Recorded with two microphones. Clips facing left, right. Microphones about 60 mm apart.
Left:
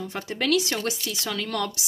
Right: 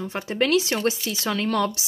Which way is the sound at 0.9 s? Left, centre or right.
Right.